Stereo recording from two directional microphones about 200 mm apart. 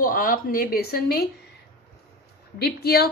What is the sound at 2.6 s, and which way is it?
Speech, 50° left (ahead or behind).